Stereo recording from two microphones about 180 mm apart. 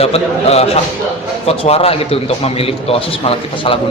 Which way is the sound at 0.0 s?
35° left (ahead or behind).